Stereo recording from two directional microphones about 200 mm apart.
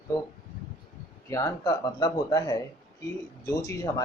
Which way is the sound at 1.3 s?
15° left (ahead or behind).